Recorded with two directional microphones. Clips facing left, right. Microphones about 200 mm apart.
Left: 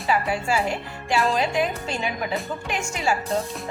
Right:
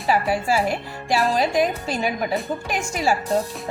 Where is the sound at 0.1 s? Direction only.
35° right (ahead or behind).